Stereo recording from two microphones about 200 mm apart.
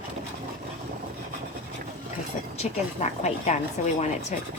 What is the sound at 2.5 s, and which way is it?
Speech, 35° left (ahead or behind).